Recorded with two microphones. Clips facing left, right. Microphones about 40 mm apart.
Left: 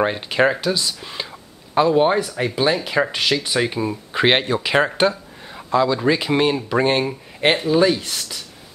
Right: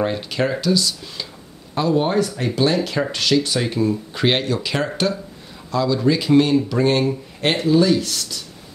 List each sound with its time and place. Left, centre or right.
0.0 s speech: left